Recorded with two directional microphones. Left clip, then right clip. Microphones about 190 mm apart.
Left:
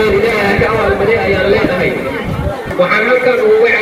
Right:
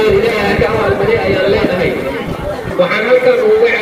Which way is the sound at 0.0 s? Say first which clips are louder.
Even; centre (ahead or behind).